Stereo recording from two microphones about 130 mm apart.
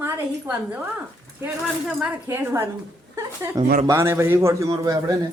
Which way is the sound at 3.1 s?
25° right (ahead or behind).